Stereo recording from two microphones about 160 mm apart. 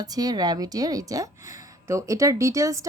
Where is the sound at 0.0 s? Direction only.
25° right (ahead or behind).